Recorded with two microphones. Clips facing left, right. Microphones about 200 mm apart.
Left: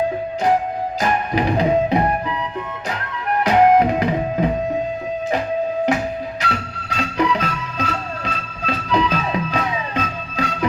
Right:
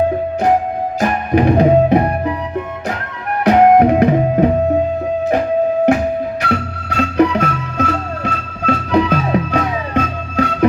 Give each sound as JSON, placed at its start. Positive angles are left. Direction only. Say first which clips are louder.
{"t": 0.9, "sound": "music", "louder": "right 6 dB", "side_deg": -50}
{"t": 3.4, "sound": "music", "louder": "right 5 dB", "side_deg": -55}
{"t": 6.4, "sound": "music", "louder": "right 6 dB", "side_deg": -55}